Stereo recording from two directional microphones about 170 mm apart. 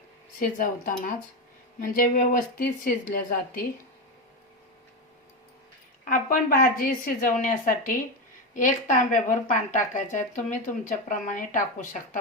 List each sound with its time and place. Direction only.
0.3 s a woman's voice: 55° left (ahead or behind)
6.1 s speech: 50° left (ahead or behind)